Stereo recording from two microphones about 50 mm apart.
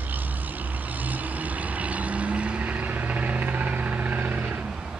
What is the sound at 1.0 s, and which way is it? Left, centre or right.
Vehicle, right.